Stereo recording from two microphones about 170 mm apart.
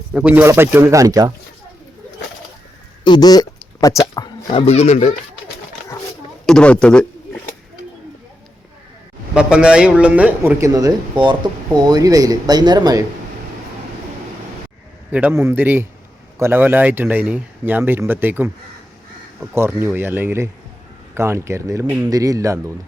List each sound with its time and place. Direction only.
0.1 s speech: 5° right (ahead or behind)
3.0 s a sound: 25° left (ahead or behind)
4.6 s speech: 40° left (ahead or behind)
6.4 s speech: 5° left (ahead or behind)
9.3 s speech: 5° right (ahead or behind); by 13.1 s 20° right (ahead or behind)
15.1 s speech: 10° right (ahead or behind)
19.5 s speech: 15° right (ahead or behind)